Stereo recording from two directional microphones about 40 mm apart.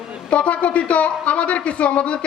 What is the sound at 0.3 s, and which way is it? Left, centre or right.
A man's voice, left.